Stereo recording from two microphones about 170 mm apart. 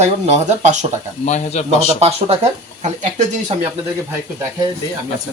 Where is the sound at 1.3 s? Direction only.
40° left (ahead or behind).